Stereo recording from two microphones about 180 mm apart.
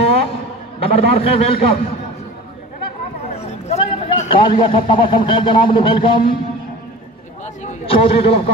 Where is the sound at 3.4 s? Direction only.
35° left (ahead or behind).